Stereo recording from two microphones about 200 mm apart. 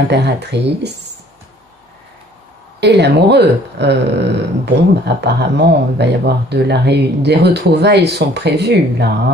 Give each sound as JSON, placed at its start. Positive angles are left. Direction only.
{"t": 0.1, "sound": "speech", "side_deg": -55}
{"t": 2.8, "sound": "speech", "side_deg": -55}